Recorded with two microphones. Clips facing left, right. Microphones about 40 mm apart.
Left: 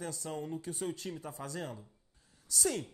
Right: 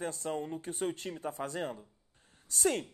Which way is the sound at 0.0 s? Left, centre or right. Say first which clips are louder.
Right 4 dB; right.